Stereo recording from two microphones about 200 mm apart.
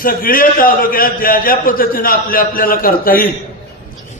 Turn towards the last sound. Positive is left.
turn(degrees=45)  # may be behind; listen again after turning